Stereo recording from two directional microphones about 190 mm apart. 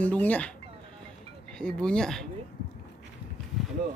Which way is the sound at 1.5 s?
5° left (ahead or behind).